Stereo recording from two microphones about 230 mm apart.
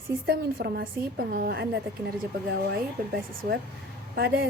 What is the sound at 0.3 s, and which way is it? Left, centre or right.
A woman's voice, right.